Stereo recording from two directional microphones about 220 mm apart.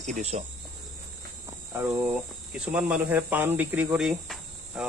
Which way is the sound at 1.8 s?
5° right (ahead or behind).